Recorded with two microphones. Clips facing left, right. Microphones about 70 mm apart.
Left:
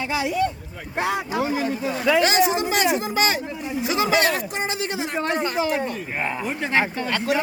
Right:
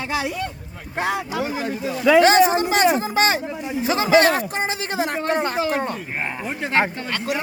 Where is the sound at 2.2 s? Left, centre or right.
Right.